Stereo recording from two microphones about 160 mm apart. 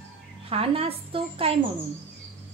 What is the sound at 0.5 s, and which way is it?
A woman's voice, 35° right (ahead or behind).